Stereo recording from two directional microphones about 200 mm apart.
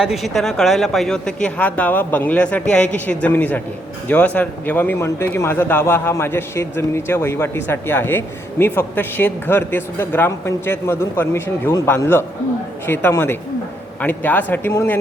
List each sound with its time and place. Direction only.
0.0 s a man's voice: centre (ahead or behind)